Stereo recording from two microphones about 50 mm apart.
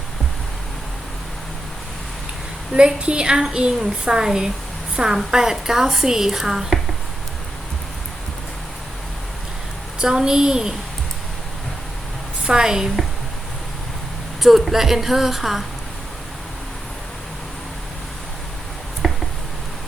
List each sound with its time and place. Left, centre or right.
2.7 s a woman's voice: centre
10.0 s a woman's voice: centre
12.5 s a woman's voice: centre
14.4 s a woman's voice: centre
19.0 s a sound: centre